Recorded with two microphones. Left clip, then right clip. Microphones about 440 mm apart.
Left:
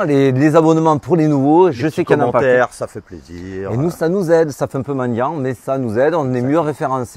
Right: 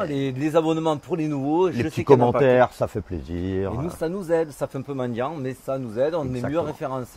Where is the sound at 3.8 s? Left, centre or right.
Left.